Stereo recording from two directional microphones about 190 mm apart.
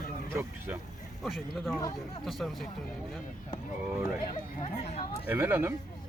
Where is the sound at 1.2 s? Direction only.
Centre (ahead or behind).